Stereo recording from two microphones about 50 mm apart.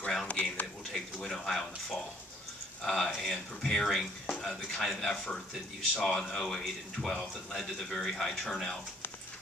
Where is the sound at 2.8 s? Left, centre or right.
Centre.